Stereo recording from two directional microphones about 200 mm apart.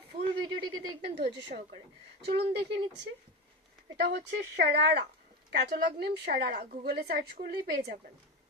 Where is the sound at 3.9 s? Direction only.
55° right (ahead or behind).